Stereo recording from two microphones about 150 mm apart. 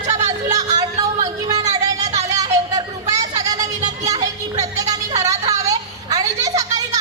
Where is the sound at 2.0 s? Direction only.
50° right (ahead or behind).